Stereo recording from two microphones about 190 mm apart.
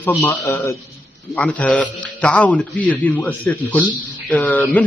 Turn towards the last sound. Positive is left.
turn(degrees=10)  # may be behind; listen again after turning